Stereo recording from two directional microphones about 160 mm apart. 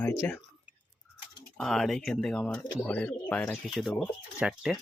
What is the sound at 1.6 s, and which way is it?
Speech, centre (ahead or behind).